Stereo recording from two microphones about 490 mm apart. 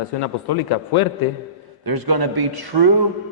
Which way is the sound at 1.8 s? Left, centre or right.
Right.